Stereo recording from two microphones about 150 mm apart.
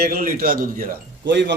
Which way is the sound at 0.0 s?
75° right (ahead or behind).